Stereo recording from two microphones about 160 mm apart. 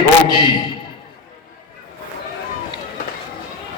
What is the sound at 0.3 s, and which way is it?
Speech, 30° left (ahead or behind).